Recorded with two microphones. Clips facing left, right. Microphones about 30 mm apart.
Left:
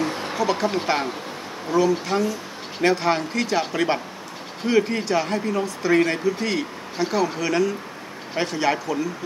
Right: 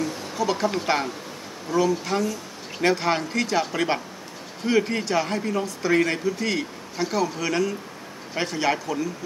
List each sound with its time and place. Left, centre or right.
0.0 s a sound: left
0.4 s a man's voice: centre
1.8 s a man's voice: centre